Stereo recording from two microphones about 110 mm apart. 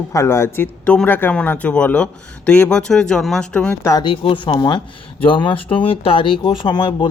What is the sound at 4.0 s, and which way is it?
Speech, 50° left (ahead or behind).